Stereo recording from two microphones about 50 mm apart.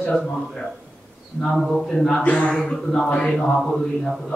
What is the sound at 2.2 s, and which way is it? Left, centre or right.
Speech, left.